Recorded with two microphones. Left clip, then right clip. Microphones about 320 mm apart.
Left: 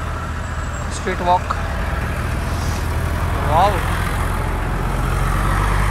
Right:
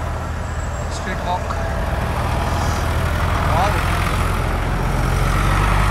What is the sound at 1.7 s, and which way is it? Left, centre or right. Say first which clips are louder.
Vehicle: right 1 dB; right.